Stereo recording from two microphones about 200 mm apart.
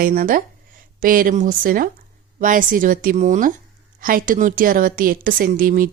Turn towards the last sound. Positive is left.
turn(degrees=-45)  # may be behind; listen again after turning